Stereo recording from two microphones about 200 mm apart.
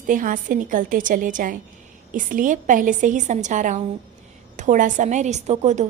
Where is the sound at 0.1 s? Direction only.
40° right (ahead or behind).